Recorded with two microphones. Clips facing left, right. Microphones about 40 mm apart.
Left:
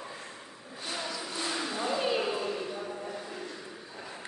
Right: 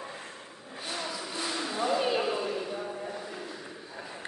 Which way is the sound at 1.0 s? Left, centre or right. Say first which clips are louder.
Even; centre.